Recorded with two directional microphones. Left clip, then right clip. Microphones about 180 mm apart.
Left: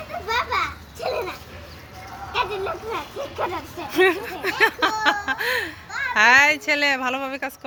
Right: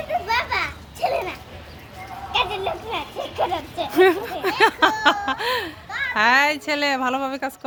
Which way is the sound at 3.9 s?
25° right (ahead or behind).